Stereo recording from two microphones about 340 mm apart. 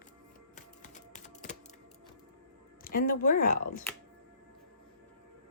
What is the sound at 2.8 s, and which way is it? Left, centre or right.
Speech, left.